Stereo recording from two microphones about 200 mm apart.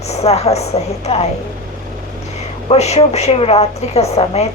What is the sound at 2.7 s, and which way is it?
Speech, 30° left (ahead or behind).